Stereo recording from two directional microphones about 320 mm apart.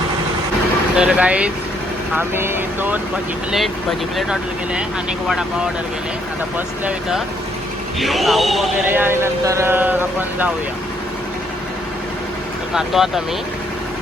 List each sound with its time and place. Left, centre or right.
0.9 s a man's voice: centre
4.2 s a man's voice: centre
7.9 s a man's voice: centre
12.7 s a man's voice: centre